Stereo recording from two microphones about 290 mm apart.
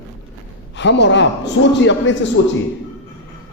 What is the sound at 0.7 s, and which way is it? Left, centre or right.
Speech, left.